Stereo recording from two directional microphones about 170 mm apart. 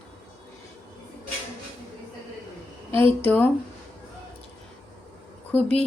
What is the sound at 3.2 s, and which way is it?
Speech, 10° left (ahead or behind).